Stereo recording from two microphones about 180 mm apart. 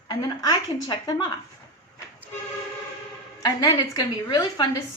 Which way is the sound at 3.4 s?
20° left (ahead or behind).